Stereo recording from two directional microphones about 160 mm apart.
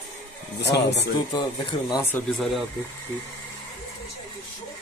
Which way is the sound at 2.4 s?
Centre (ahead or behind).